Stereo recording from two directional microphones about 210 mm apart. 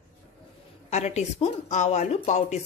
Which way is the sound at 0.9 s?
35° left (ahead or behind).